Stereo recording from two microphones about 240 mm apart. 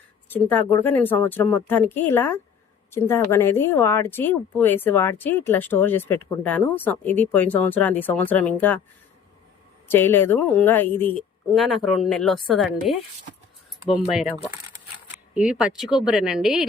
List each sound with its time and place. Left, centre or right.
0.3 s speech: centre
9.9 s a woman's voice: centre